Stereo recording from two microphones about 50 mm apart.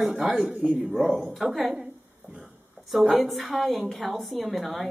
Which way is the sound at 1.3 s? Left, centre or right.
Centre.